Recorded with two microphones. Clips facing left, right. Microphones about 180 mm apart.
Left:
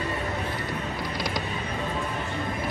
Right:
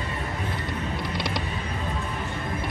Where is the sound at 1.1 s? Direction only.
30° right (ahead or behind).